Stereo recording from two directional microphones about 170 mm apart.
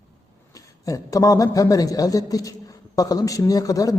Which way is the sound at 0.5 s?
20° left (ahead or behind).